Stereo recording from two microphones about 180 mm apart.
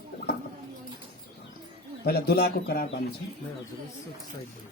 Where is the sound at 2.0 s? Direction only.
60° left (ahead or behind).